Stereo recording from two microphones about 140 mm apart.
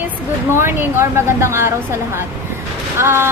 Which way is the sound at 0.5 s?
15° right (ahead or behind).